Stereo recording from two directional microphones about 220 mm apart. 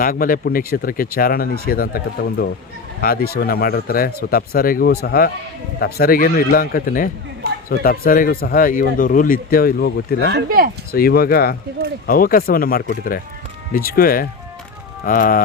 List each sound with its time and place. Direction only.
0.0 s speech: 40° left (ahead or behind)
10.3 s speech: 45° right (ahead or behind)
10.9 s speech: 45° left (ahead or behind)